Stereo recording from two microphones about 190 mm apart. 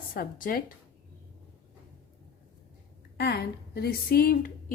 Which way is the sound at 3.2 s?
60° left (ahead or behind).